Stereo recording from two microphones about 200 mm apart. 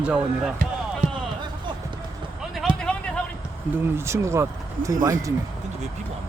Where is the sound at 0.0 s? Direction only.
5° right (ahead or behind).